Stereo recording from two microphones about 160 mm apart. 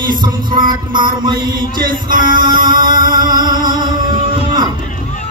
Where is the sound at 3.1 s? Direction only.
25° right (ahead or behind).